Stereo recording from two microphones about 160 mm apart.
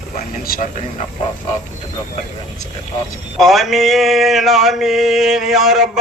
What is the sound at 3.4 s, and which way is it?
Mantra, centre (ahead or behind).